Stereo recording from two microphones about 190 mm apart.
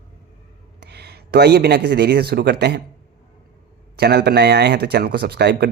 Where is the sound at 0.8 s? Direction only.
60° right (ahead or behind).